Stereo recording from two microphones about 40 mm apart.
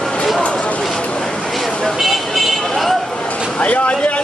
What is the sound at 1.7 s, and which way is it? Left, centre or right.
Vehicle, left.